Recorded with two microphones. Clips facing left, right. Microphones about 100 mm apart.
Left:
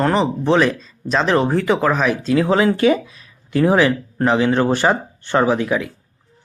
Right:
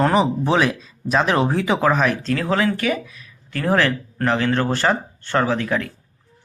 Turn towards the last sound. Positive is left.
turn(degrees=10)  # may be behind; listen again after turning